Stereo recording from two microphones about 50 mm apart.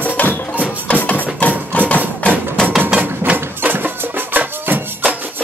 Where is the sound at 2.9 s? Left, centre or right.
Right.